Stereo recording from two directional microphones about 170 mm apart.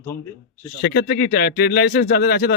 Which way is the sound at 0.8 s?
80° left.